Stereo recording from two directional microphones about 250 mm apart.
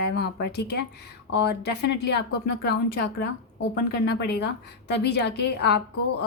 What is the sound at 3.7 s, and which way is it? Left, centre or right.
A woman's voice, left.